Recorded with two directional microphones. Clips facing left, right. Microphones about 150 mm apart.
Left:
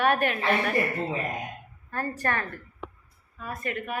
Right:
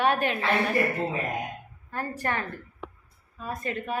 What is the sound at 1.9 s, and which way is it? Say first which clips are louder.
Speech: left 1 dB; 15° right (ahead or behind).